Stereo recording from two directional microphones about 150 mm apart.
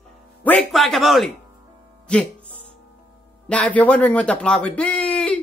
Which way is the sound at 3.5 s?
10° left (ahead or behind).